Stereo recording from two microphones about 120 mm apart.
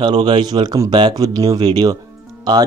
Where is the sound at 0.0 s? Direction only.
40° right (ahead or behind).